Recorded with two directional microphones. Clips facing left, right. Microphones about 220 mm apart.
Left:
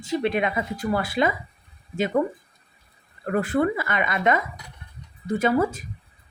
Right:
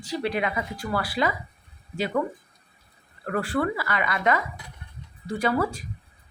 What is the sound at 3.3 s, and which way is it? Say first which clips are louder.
A woman's voice: left 4 dB; 20° left (ahead or behind).